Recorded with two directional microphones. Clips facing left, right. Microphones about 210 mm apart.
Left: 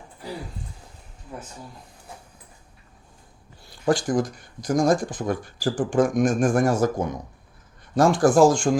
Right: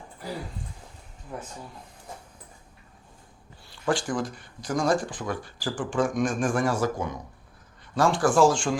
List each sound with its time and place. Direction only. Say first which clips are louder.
3.7 s speech: left 5 dB; 40° left (ahead or behind)